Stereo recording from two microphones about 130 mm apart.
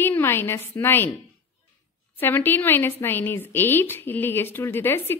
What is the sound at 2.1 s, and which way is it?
A woman's voice, 15° left (ahead or behind).